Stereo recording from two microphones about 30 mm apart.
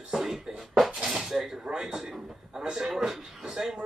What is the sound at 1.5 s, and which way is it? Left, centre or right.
A man's voice, right.